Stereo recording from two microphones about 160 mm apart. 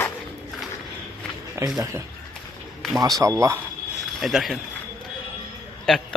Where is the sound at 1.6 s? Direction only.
20° right (ahead or behind).